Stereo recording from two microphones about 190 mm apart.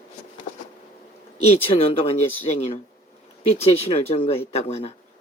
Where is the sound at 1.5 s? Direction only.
30° left (ahead or behind).